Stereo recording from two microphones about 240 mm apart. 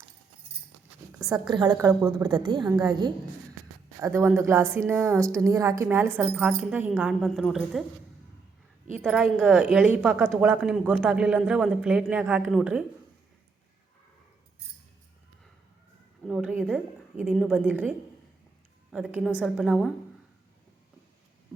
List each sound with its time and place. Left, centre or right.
1.5 s speech: centre
9.0 s speech: centre
16.2 s a woman's voice: centre